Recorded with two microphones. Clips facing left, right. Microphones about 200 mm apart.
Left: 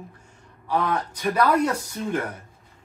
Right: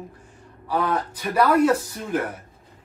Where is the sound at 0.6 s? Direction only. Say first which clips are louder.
Right 1 dB; 5° right (ahead or behind).